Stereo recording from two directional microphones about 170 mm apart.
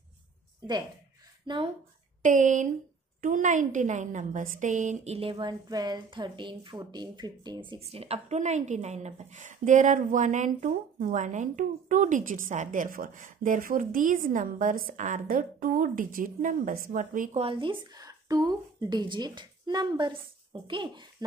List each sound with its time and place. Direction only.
1.5 s a woman's voice: 25° right (ahead or behind)
2.2 s a woman's voice: 50° right (ahead or behind); by 7.8 s 25° right (ahead or behind)
7.8 s a woman's voice: 35° right (ahead or behind)
17.4 s a woman's voice: 30° right (ahead or behind)